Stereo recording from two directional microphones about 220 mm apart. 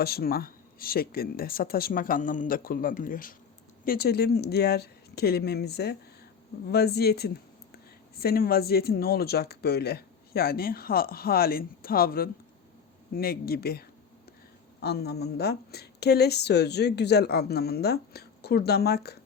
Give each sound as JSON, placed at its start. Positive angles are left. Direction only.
{"t": 0.0, "sound": "speech", "side_deg": 45}